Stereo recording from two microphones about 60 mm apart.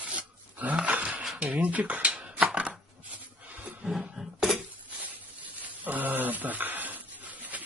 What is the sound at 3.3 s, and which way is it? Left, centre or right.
Roaring cats, right.